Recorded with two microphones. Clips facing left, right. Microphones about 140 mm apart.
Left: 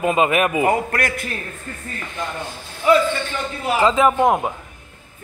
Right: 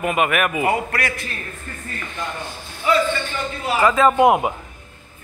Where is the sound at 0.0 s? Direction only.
25° left (ahead or behind).